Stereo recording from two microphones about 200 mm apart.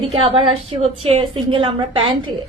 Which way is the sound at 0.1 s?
25° right (ahead or behind).